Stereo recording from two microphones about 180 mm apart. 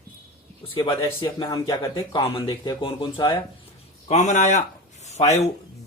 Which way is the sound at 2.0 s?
30° left (ahead or behind).